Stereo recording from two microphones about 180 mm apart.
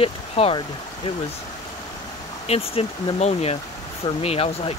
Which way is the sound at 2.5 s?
35° left (ahead or behind).